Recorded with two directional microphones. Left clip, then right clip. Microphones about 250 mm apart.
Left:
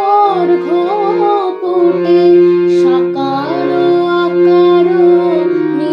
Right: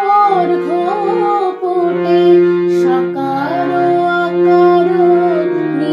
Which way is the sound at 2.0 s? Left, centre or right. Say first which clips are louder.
Left 1 dB; left.